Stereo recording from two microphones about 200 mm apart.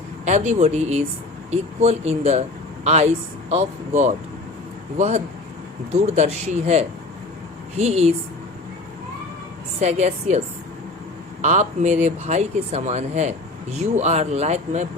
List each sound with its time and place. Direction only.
0.3 s speech: 35° right (ahead or behind)
9.8 s speech: 35° right (ahead or behind)
11.4 s speech: 35° right (ahead or behind)